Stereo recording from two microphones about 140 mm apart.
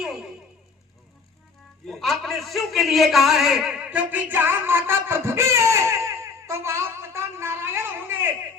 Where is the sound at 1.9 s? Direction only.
Centre (ahead or behind).